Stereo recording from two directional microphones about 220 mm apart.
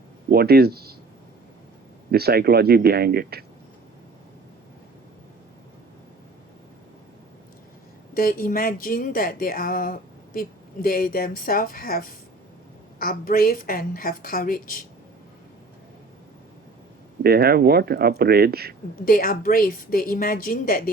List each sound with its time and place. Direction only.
0.3 s speech: 45° right (ahead or behind)
2.0 s speech: 45° right (ahead or behind)
8.1 s a woman's voice: 40° left (ahead or behind)
17.2 s speech: 45° right (ahead or behind)
19.0 s a woman's voice: 40° left (ahead or behind)